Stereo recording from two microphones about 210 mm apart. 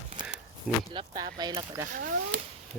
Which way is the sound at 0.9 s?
20° right (ahead or behind).